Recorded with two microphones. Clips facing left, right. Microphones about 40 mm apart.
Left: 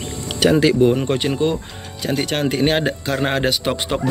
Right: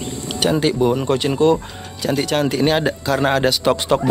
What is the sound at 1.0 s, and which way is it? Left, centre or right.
A man's voice, left.